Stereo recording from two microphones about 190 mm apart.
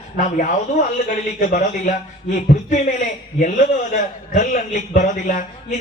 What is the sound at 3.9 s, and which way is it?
A man's voice, 40° left (ahead or behind).